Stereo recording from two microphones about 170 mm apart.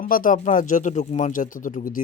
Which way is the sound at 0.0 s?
55° left (ahead or behind).